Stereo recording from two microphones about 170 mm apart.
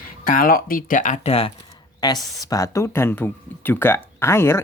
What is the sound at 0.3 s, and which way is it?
Speech, 55° left (ahead or behind).